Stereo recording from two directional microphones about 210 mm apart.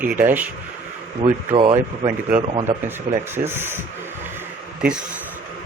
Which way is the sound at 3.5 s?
10° right (ahead or behind).